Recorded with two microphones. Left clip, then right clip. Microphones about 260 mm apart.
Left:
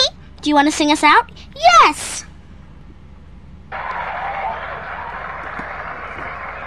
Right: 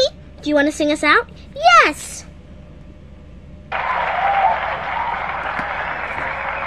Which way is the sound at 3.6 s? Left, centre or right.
Right.